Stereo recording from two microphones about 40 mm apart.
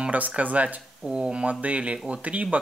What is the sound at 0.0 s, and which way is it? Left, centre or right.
Speech, right.